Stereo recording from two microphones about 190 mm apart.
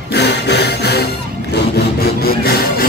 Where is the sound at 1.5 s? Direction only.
55° left (ahead or behind).